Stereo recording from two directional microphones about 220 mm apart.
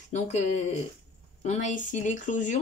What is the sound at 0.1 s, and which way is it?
Speech, 30° left (ahead or behind).